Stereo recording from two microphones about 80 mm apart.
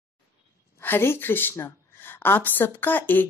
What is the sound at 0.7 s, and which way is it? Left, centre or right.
A woman's voice, left.